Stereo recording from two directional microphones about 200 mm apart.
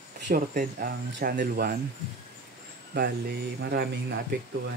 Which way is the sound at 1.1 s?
50° right (ahead or behind).